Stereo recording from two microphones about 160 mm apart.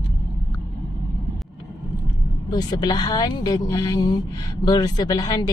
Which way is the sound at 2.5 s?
25° left (ahead or behind).